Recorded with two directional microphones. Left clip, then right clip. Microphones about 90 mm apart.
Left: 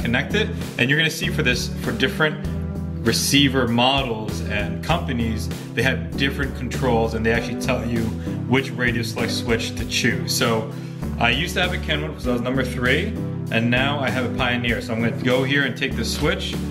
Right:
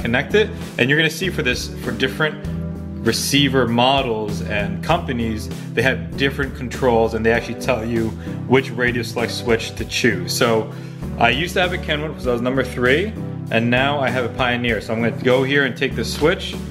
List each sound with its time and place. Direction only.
0.0 s speech: 30° right (ahead or behind)